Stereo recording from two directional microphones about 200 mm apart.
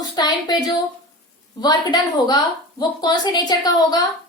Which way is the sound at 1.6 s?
20° left (ahead or behind).